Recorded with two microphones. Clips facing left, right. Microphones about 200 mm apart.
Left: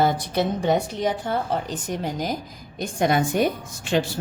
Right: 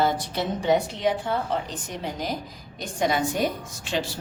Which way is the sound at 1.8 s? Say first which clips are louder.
Left 4 dB; 45° left (ahead or behind).